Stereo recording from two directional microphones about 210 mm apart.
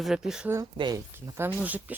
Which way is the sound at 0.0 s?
Centre (ahead or behind).